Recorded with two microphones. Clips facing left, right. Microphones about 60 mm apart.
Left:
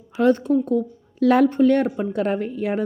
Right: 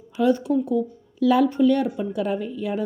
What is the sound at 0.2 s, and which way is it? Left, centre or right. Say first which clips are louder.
A woman's voice: left 2 dB; left.